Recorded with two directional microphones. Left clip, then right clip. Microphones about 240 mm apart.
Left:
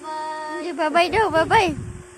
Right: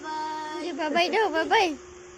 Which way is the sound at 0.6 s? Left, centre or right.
Centre.